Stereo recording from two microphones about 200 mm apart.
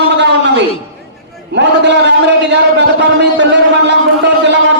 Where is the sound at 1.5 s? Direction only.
60° right (ahead or behind).